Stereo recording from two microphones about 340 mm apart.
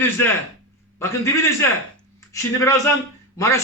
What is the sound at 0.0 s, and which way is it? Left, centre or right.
A man's voice, centre.